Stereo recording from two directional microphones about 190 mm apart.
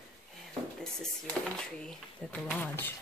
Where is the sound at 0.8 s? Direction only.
5° left (ahead or behind).